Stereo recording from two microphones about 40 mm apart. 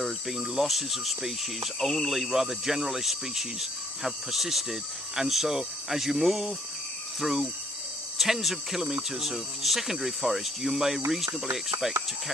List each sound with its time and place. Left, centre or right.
0.0 s speech: centre
7.2 s cricket: centre
8.2 s speech: centre